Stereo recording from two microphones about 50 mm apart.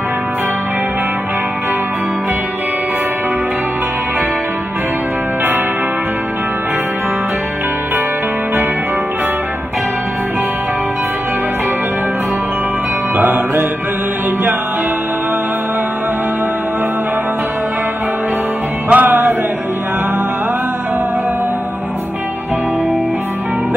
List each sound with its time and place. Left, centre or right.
13.2 s music: right
18.9 s music: right